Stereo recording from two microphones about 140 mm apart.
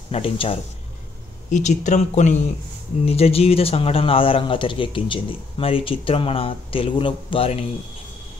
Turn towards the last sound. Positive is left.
turn(degrees=45)  # may be behind; listen again after turning